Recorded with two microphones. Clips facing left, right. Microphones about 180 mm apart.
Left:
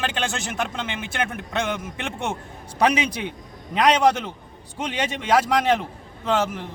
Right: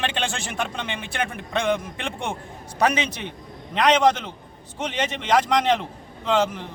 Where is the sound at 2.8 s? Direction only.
10° left (ahead or behind).